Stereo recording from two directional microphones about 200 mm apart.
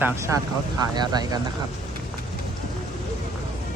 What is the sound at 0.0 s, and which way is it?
Speech, 15° right (ahead or behind).